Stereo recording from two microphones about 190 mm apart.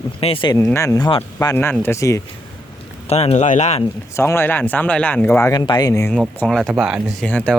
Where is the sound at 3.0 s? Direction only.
35° left (ahead or behind).